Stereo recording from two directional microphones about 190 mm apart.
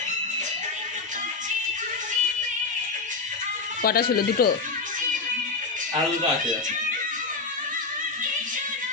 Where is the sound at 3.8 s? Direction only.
50° left (ahead or behind).